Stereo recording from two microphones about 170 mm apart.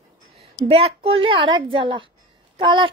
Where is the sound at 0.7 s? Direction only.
35° right (ahead or behind).